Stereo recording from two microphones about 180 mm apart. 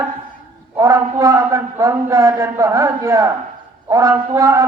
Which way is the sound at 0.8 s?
15° right (ahead or behind).